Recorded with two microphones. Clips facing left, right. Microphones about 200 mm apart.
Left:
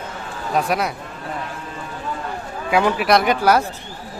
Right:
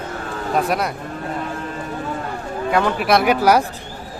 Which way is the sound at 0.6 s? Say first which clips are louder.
Even; centre (ahead or behind).